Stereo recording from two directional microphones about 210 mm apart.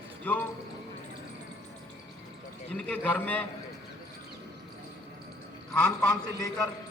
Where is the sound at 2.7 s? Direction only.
5° left (ahead or behind).